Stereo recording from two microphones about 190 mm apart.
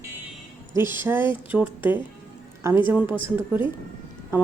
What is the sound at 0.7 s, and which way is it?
A woman's voice, 10° right (ahead or behind).